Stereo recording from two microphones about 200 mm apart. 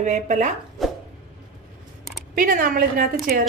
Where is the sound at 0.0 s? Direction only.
35° right (ahead or behind).